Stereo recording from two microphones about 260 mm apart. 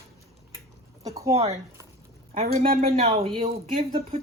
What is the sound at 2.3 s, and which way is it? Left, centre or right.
Speech, right.